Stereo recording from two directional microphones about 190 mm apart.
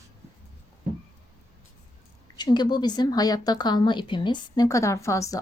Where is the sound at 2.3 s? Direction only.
20° left (ahead or behind).